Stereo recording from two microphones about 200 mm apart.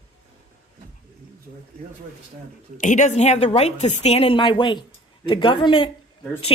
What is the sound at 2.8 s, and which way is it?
A woman's voice, 35° left (ahead or behind).